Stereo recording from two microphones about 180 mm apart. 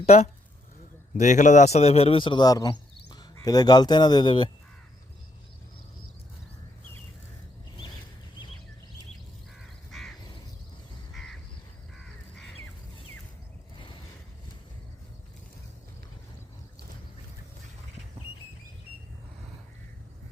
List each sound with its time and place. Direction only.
0.0 s a man's voice: 35° left (ahead or behind)
9.9 s crow: centre (ahead or behind)
11.1 s crow: centre (ahead or behind)
13.7 s a sound: 25° left (ahead or behind)